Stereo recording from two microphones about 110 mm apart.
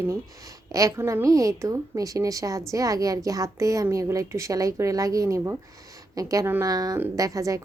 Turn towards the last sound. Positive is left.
turn(degrees=-30)  # may be behind; listen again after turning